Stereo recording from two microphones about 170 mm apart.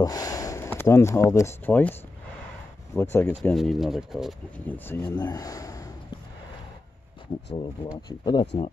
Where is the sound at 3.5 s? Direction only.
Centre (ahead or behind).